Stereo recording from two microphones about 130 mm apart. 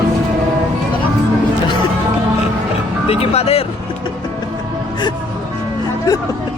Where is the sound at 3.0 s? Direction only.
50° left (ahead or behind).